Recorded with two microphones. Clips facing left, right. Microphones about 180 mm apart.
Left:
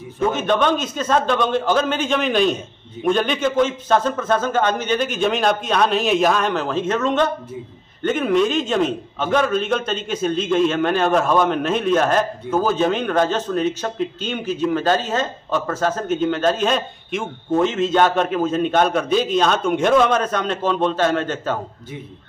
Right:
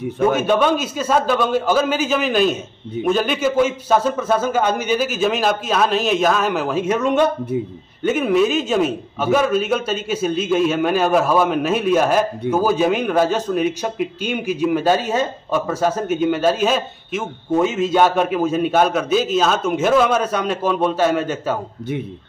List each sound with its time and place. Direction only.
0.4 s a man's voice: 10° right (ahead or behind)
7.5 s a man's voice: 65° right (ahead or behind)
8.0 s a man's voice: 5° right (ahead or behind)